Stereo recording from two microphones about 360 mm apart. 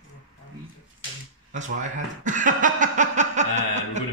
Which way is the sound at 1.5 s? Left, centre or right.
Centre.